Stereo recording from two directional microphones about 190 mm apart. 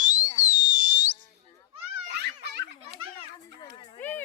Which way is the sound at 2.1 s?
60° right (ahead or behind).